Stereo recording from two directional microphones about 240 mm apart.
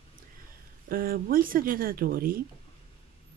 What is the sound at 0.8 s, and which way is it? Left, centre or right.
Speech, right.